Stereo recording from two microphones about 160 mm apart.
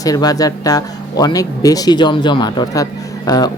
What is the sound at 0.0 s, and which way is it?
Speech, 25° left (ahead or behind).